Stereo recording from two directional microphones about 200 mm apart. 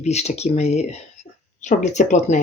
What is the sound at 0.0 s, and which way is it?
Speech, 35° left (ahead or behind).